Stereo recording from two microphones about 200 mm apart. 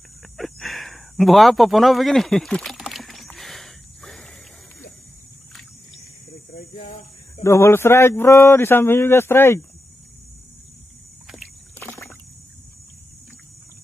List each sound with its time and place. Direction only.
0.4 s a sound: centre (ahead or behind)
6.8 s speech: 30° left (ahead or behind)
7.4 s speech: 15° left (ahead or behind)
11.2 s rowboat: centre (ahead or behind)